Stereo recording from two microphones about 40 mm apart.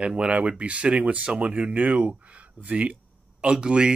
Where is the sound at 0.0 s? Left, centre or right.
Right.